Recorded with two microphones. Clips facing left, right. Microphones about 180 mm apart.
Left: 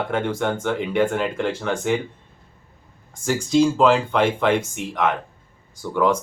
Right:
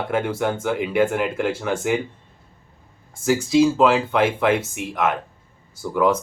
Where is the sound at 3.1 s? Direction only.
5° right (ahead or behind).